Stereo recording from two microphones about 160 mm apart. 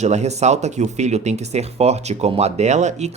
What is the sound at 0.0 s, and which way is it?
A man's voice, 45° right (ahead or behind).